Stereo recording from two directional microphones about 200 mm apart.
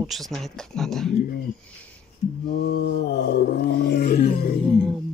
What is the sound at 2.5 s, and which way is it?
Roar, 60° left (ahead or behind).